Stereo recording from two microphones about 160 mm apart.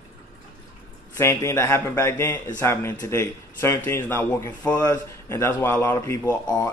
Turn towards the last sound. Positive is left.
turn(degrees=25)  # may be behind; listen again after turning